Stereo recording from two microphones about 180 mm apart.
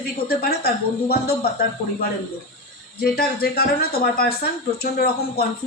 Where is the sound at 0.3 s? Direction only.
60° left (ahead or behind).